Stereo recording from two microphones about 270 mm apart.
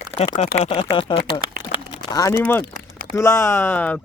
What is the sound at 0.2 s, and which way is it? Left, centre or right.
Speech, left.